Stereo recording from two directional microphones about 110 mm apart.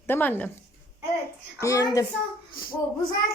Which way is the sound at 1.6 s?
30° left (ahead or behind).